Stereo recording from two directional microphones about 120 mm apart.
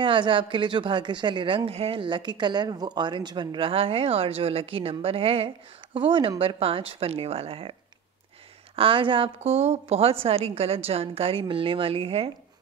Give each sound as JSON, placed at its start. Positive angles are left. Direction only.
{"t": 0.0, "sound": "speech", "side_deg": -45}
{"t": 8.7, "sound": "speech", "side_deg": -45}